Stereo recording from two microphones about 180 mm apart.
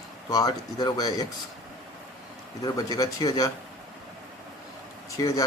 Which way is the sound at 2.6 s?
20° left (ahead or behind).